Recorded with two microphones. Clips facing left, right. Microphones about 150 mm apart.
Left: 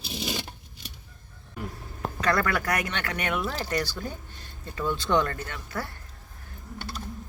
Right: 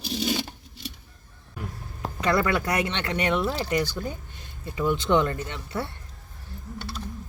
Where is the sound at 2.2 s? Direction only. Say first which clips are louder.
Right 2 dB; 20° right (ahead or behind).